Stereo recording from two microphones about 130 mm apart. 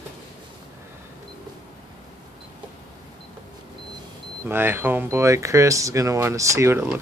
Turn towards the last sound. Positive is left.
turn(degrees=-20)  # may be behind; listen again after turning